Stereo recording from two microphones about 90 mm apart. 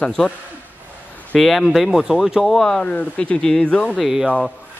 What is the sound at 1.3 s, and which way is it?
Speech, centre (ahead or behind).